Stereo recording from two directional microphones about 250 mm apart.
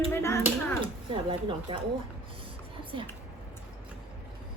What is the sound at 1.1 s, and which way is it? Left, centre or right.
Speech, centre.